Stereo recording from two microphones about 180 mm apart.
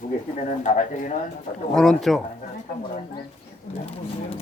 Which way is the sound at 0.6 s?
40° left (ahead or behind).